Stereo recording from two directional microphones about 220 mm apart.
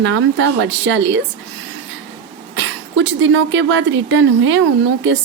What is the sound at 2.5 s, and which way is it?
Speech, 55° right (ahead or behind).